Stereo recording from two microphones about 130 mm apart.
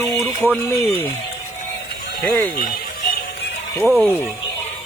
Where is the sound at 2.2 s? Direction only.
20° left (ahead or behind).